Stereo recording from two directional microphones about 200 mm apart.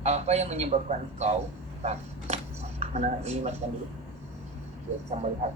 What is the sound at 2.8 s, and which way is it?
Speech, 35° right (ahead or behind).